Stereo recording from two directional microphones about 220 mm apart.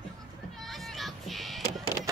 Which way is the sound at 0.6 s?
Centre (ahead or behind).